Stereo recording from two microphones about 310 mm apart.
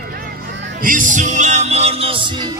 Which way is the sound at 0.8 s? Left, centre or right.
Right.